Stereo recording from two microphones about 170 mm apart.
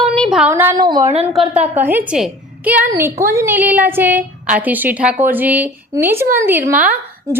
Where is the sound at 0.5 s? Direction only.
15° right (ahead or behind).